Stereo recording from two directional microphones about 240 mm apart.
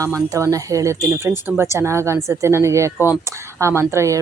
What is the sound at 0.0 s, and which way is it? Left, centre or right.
Speech, centre.